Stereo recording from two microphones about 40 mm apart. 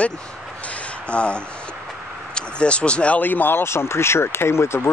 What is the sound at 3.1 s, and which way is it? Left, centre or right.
Speech, left.